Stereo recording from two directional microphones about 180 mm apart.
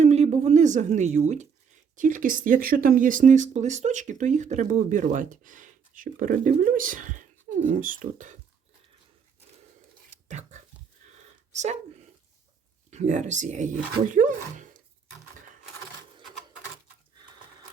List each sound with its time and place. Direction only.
0.0 s speech: 40° right (ahead or behind)
10.2 s a sound: 40° right (ahead or behind)
11.5 s speech: 40° right (ahead or behind)
12.9 s speech: 40° right (ahead or behind)